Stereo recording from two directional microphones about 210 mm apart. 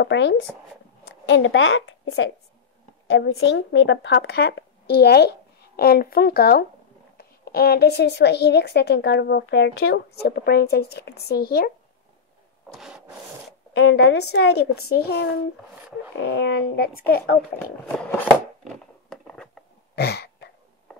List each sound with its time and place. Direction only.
0.0 s a woman's voice: 55° left (ahead or behind)
12.6 s rub: centre (ahead or behind)
13.7 s a woman's voice: 55° left (ahead or behind)
17.8 s a sound: 5° left (ahead or behind)
20.0 s throat clearing: 50° left (ahead or behind)